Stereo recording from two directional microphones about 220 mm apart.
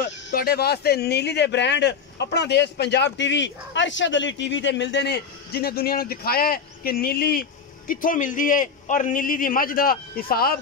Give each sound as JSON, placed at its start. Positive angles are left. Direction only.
{"t": 0.3, "sound": "speech", "side_deg": 45}